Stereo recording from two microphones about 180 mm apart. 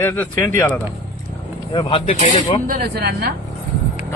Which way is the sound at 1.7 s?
30° left (ahead or behind).